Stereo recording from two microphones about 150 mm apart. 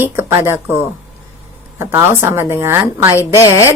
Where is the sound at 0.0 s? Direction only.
15° right (ahead or behind).